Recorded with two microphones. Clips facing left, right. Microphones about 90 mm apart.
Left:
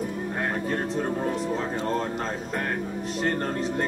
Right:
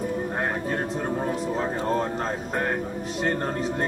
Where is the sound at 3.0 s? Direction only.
5° right (ahead or behind).